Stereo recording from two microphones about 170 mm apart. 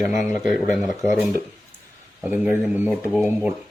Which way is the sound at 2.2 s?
10° right (ahead or behind).